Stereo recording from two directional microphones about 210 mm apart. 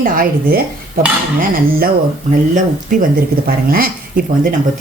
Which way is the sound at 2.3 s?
40° right (ahead or behind).